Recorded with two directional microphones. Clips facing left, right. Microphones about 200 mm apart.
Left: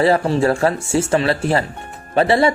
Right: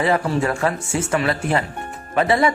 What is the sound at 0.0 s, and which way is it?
Speech, 30° left (ahead or behind).